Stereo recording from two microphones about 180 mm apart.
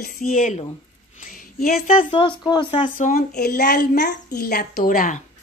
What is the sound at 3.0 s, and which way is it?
A woman's voice, 50° left (ahead or behind).